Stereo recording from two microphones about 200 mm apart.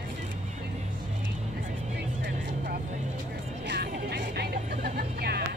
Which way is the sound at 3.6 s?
55° right (ahead or behind).